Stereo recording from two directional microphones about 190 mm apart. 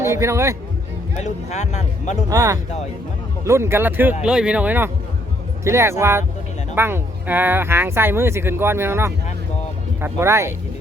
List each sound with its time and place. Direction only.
0.0 s speech: 15° right (ahead or behind)
1.1 s speech: 35° left (ahead or behind)
2.3 s speech: 15° right (ahead or behind)